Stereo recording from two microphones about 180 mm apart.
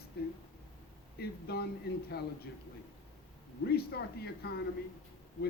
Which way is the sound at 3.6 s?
65° left (ahead or behind).